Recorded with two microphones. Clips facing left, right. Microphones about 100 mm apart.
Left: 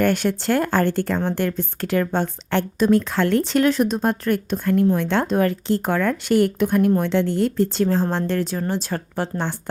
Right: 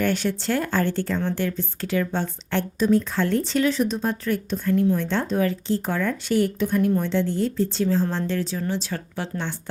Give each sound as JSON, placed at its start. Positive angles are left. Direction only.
{"t": 0.0, "sound": "a woman's voice", "side_deg": 55}